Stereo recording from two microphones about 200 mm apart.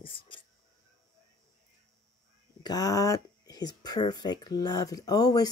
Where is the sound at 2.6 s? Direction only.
20° left (ahead or behind).